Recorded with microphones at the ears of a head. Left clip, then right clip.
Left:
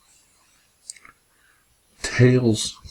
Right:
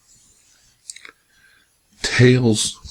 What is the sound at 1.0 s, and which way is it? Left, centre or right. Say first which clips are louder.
Clicking: right 7 dB; right.